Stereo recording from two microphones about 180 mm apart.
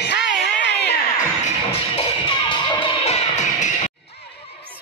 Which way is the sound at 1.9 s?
25° left (ahead or behind).